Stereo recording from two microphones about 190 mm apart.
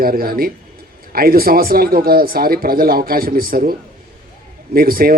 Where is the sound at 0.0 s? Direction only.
50° right (ahead or behind).